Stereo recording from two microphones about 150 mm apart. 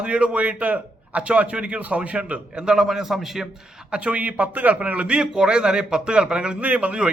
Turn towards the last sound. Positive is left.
turn(degrees=-5)  # may be behind; listen again after turning